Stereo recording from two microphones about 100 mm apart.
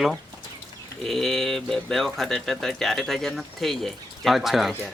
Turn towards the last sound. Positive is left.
turn(degrees=0)  # may be behind; listen again after turning